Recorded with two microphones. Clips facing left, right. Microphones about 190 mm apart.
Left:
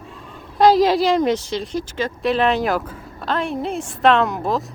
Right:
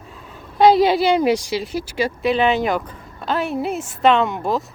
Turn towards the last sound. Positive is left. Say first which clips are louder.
# even
turn(degrees=0)  # may be behind; listen again after turning